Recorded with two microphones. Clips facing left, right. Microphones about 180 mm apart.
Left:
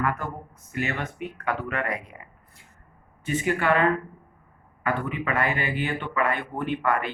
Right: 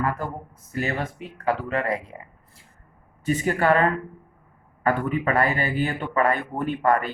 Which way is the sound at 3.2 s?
40° right (ahead or behind).